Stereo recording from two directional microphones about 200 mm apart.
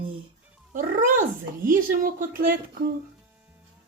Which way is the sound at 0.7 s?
40° right (ahead or behind).